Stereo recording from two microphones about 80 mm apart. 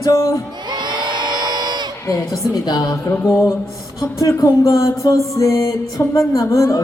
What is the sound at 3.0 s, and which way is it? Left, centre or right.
Music, left.